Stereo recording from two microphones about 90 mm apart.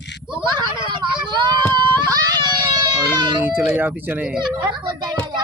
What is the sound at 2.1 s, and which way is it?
Baby cry, 45° right (ahead or behind).